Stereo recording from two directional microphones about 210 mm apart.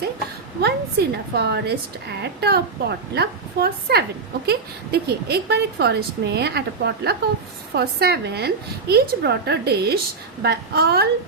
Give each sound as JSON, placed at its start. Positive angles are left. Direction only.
{"t": 0.6, "sound": "a woman's voice", "side_deg": -50}